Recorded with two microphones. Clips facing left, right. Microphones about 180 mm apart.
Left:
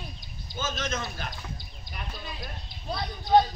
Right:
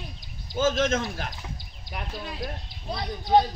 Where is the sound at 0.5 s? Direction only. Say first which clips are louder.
Right 9 dB; 90° right.